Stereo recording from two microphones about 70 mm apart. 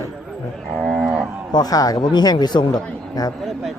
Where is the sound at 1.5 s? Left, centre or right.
Left.